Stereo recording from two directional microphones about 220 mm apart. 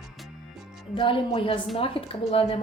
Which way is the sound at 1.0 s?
25° left (ahead or behind).